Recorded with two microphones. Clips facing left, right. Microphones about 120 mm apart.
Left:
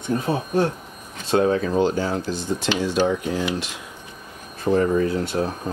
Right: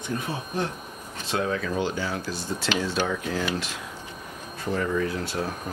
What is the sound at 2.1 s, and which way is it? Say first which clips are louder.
Speech: left 6 dB; 20° left (ahead or behind).